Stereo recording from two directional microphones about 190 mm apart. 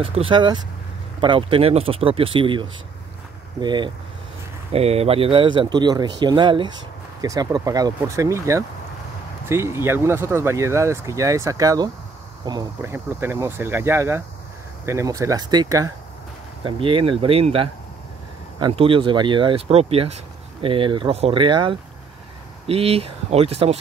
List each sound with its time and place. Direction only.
0.0 s speech: 30° right (ahead or behind)